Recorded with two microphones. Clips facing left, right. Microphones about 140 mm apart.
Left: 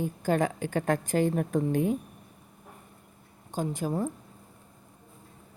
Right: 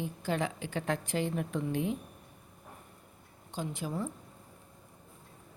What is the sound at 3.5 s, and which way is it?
Speech, 45° left (ahead or behind).